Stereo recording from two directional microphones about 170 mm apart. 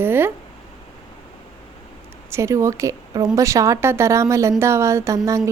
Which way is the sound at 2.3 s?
15° right (ahead or behind).